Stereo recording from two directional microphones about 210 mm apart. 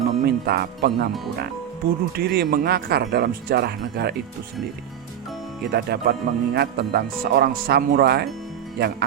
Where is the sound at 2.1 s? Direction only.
50° right (ahead or behind).